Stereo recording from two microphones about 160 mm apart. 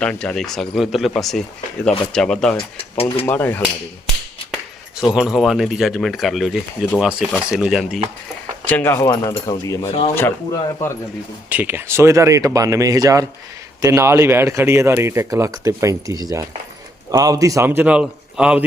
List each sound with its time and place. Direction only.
0.0 s speech: 5° left (ahead or behind)
4.9 s speech: 5° right (ahead or behind)
8.6 s speech: 15° left (ahead or behind)
11.4 s speech: 10° right (ahead or behind)